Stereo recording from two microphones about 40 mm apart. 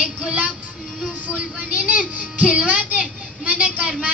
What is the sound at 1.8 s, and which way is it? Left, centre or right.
A child's voice, right.